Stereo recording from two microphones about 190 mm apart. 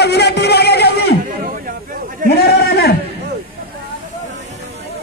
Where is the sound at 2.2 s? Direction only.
55° left (ahead or behind).